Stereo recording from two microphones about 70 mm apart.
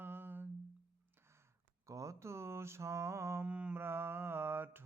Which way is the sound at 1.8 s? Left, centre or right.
Right.